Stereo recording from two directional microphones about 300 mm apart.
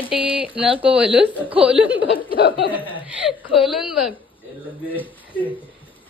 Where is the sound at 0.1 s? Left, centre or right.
Centre.